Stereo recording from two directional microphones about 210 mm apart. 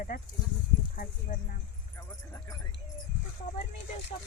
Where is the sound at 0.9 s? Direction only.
40° left (ahead or behind).